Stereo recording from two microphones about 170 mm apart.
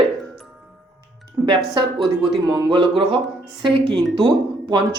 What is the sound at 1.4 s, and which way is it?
Speech, 30° right (ahead or behind).